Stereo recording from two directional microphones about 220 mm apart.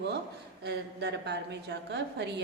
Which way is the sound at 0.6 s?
50° right (ahead or behind).